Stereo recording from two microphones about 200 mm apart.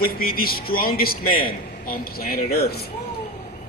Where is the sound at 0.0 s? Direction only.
45° left (ahead or behind).